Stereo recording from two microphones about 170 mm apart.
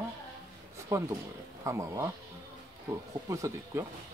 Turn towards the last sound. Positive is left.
turn(degrees=-20)  # may be behind; listen again after turning